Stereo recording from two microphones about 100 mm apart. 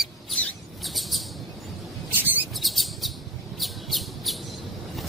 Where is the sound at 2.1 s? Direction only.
20° right (ahead or behind).